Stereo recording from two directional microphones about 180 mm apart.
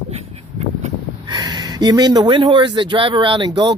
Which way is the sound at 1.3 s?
20° right (ahead or behind).